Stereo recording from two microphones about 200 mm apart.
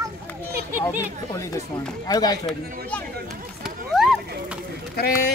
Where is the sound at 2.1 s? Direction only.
20° left (ahead or behind).